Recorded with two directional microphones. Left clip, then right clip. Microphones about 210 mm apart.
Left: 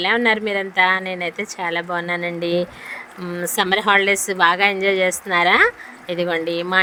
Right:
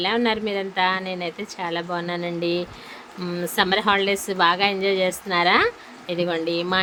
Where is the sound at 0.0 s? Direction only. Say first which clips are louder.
Left 5 dB; 25° left (ahead or behind).